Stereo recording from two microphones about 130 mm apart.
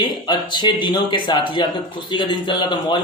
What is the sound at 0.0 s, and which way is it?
A man's voice, 35° left (ahead or behind).